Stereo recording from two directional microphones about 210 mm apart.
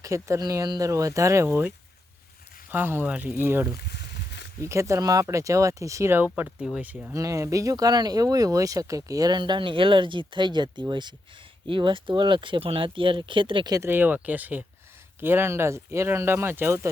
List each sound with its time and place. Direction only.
0.0 s speech: 15° right (ahead or behind)
3.8 s a sound: 55° left (ahead or behind)
4.6 s speech: 15° right (ahead or behind)